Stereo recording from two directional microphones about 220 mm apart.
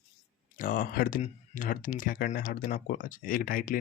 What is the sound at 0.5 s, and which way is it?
Speech, 40° left (ahead or behind).